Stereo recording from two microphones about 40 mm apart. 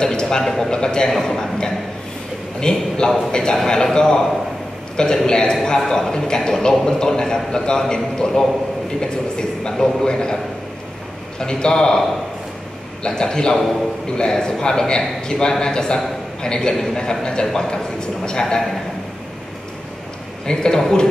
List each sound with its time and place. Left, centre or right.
0.0 s a man's voice: centre
13.0 s a man's voice: centre
20.4 s a man's voice: centre